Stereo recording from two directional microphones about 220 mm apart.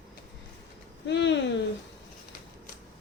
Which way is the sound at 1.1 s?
55° left (ahead or behind).